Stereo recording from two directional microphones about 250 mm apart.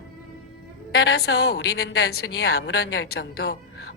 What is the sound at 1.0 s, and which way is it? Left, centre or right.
A woman's voice, left.